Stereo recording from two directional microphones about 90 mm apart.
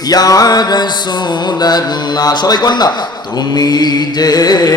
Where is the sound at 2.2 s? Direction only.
45° left (ahead or behind).